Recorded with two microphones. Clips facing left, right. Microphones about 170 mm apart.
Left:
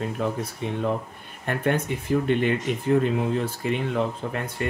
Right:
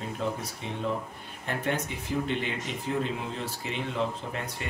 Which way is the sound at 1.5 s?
55° left (ahead or behind).